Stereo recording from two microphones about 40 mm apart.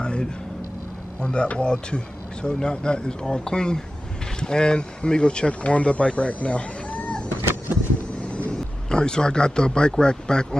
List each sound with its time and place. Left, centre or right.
0.0 s a sound: left
1.2 s speech: left
8.2 s vehicle: left
8.9 s speech: left